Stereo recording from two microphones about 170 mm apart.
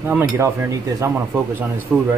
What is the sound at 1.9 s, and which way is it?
Speech, centre (ahead or behind).